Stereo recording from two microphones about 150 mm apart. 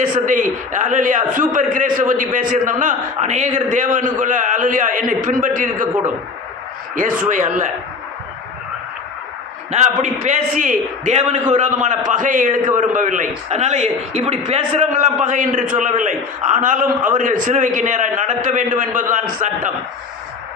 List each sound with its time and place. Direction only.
0.0 s a man's voice: 60° right (ahead or behind)
6.9 s a man's voice: 60° right (ahead or behind)
9.7 s a man's voice: 50° right (ahead or behind)